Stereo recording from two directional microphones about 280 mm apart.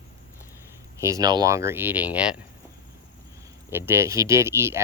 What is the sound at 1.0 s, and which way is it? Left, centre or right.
Speech, centre.